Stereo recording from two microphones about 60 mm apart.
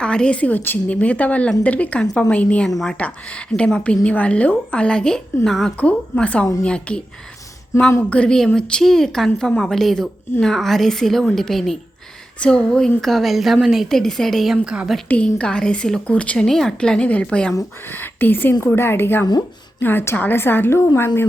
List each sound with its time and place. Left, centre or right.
0.0 s a woman's voice: centre
2.6 s a woman's voice: centre
3.0 s a woman's voice: left; by 5.7 s centre
5.7 s a woman's voice: left
8.1 s a woman's voice: centre
8.8 s a woman's voice: centre
12.4 s a woman's voice: centre
13.0 s a woman's voice: centre
13.8 s a woman's voice: centre
15.1 s a woman's voice: centre
16.5 s a woman's voice: centre
17.8 s speech: left